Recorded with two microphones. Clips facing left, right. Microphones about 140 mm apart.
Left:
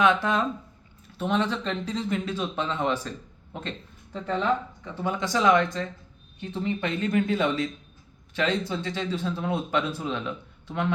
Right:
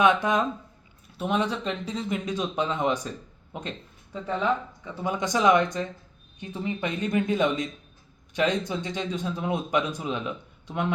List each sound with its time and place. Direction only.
0.0 s a man's voice: 20° right (ahead or behind)